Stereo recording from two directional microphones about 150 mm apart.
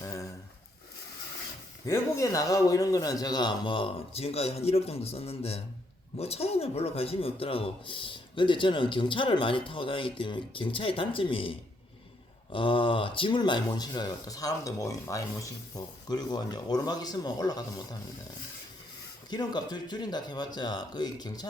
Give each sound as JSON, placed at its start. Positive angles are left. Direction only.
{"t": 0.0, "sound": "a sound", "side_deg": 20}
{"t": 1.9, "sound": "a man's voice", "side_deg": 20}
{"t": 19.3, "sound": "speech", "side_deg": 30}